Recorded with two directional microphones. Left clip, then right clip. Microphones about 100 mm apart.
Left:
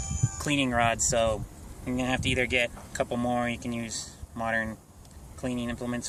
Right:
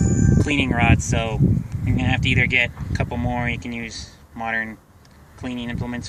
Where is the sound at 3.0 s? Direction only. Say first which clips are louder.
Right 2 dB; 50° left (ahead or behind).